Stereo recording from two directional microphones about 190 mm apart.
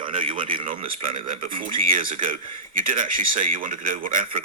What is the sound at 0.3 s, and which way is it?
Speech, 45° right (ahead or behind).